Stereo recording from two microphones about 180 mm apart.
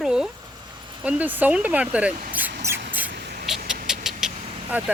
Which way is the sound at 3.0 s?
65° right (ahead or behind).